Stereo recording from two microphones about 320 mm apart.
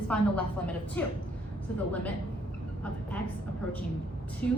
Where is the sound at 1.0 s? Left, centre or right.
Centre.